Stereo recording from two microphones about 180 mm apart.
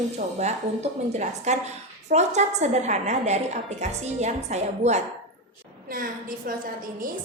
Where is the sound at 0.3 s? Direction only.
40° right (ahead or behind).